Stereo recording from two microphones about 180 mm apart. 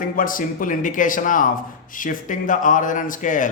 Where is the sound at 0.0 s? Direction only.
50° left (ahead or behind).